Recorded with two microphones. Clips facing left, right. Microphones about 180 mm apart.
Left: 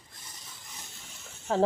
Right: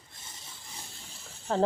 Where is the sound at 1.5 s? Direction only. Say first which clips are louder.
Left 1 dB; 5° left (ahead or behind).